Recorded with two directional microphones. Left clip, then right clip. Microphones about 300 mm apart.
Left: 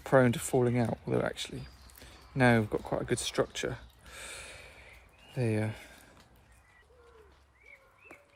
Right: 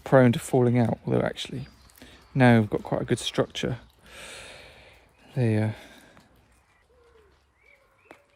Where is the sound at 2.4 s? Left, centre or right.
Right.